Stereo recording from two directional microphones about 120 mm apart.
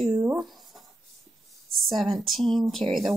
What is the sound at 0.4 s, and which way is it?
Speech, centre (ahead or behind).